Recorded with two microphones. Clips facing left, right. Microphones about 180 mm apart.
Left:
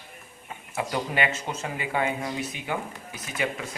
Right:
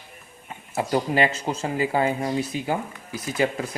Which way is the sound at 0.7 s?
35° right (ahead or behind).